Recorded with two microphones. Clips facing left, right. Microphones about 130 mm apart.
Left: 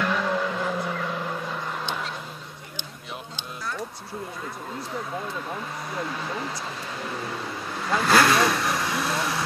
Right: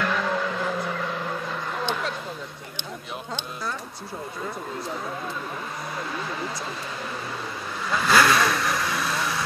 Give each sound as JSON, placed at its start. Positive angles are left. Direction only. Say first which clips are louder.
{"t": 0.0, "sound": "vehicle", "louder": "even", "side_deg": 10}
{"t": 7.9, "sound": "vehicle", "louder": "even", "side_deg": 40}